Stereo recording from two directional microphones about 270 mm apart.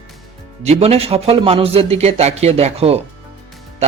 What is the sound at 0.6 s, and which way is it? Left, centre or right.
A man's voice, right.